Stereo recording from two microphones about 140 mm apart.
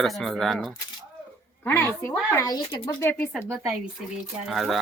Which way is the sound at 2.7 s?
30° left (ahead or behind).